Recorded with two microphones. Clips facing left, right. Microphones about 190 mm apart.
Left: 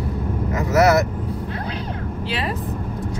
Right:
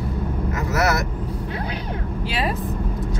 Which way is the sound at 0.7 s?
20° left (ahead or behind).